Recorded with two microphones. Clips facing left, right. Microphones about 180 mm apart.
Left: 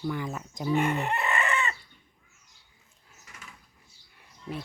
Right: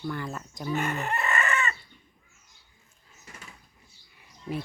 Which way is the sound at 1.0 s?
15° left (ahead or behind).